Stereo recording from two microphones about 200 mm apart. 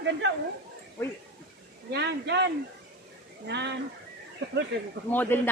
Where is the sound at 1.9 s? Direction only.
55° right (ahead or behind).